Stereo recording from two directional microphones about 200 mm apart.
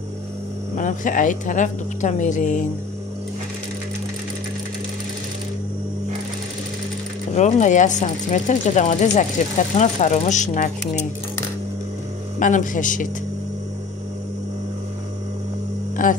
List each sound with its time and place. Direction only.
0.7 s speech: 40° left (ahead or behind)
7.3 s speech: 35° left (ahead or behind)
12.4 s speech: 40° left (ahead or behind)
16.0 s speech: 40° left (ahead or behind)